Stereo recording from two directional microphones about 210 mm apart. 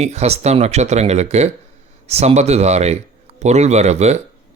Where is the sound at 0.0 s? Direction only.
30° right (ahead or behind).